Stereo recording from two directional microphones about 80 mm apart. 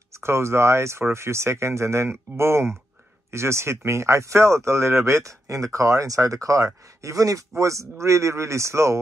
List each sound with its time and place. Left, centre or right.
0.1 s speech: right